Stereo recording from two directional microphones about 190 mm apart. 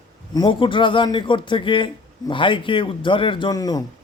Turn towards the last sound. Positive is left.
turn(degrees=20)  # may be behind; listen again after turning